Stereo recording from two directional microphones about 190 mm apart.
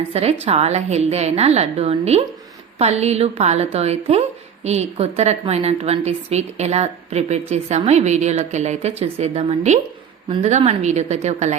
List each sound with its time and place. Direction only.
0.1 s a woman's voice: 35° right (ahead or behind)